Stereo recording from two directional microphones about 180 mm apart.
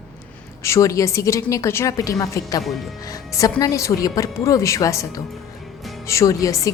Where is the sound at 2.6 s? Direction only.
Centre (ahead or behind).